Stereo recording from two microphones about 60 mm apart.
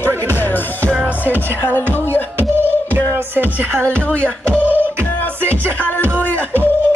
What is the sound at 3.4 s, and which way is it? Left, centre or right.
Speech, right.